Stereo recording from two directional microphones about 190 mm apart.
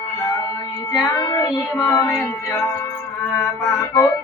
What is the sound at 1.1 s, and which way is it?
Child singing, 20° left (ahead or behind).